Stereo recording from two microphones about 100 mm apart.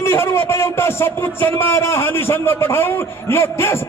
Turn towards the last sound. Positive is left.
turn(degrees=25)  # may be behind; listen again after turning